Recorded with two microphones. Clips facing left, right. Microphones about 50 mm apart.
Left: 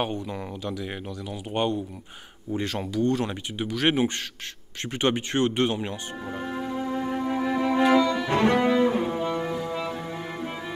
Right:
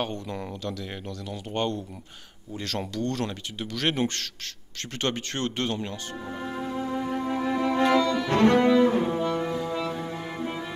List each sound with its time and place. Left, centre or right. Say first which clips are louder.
0.0 s speech: left 2 dB; centre
4.9 s music: left 5 dB; centre